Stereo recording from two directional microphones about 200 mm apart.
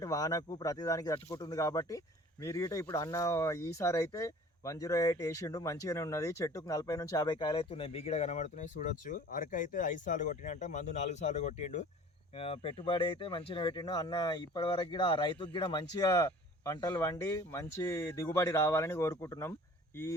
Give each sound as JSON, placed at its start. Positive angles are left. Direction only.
{"t": 0.0, "sound": "speech", "side_deg": 15}